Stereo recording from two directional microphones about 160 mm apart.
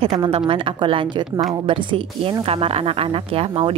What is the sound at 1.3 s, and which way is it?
Speech, centre (ahead or behind).